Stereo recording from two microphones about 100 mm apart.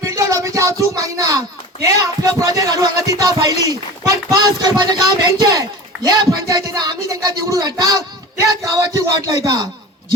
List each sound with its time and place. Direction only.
0.0 s speech: 35° right (ahead or behind)